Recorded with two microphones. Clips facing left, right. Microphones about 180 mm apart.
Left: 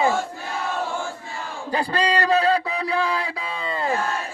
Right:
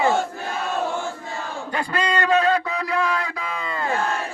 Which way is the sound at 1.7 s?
35° left (ahead or behind).